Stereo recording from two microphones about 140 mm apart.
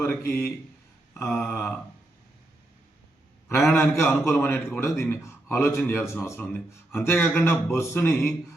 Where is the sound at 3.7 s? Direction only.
15° left (ahead or behind).